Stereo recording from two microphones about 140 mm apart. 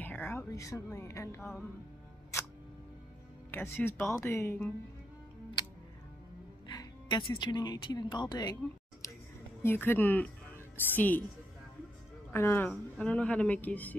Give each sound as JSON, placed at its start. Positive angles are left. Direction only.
{"t": 0.0, "sound": "speech", "side_deg": 15}
{"t": 3.5, "sound": "speech", "side_deg": 15}
{"t": 6.7, "sound": "speech", "side_deg": 30}
{"t": 9.6, "sound": "speech", "side_deg": 15}
{"t": 12.3, "sound": "speech", "side_deg": 15}